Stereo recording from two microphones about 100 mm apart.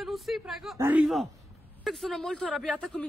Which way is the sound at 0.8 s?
15° right (ahead or behind).